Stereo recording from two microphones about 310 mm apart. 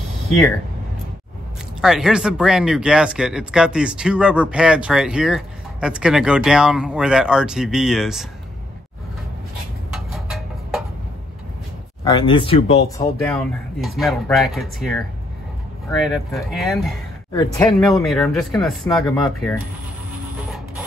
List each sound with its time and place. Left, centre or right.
1.8 s speech: centre
9.9 s a sound: centre
12.0 s speech: centre
12.9 s speech: centre
17.3 s speech: centre